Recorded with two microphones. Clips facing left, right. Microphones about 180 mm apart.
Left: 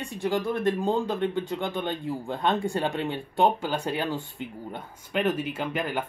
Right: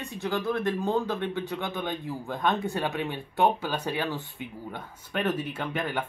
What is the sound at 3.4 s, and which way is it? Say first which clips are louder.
A man's voice: left 1 dB; 15° left (ahead or behind).